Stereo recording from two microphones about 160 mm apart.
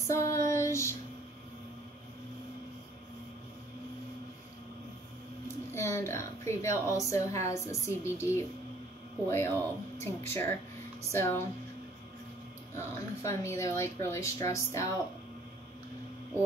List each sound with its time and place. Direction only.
0.0 s female singing: 20° left (ahead or behind)
5.7 s speech: 15° left (ahead or behind)
12.7 s speech: 20° left (ahead or behind)